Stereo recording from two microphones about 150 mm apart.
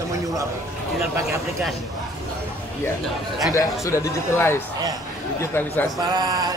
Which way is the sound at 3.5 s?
20° left (ahead or behind).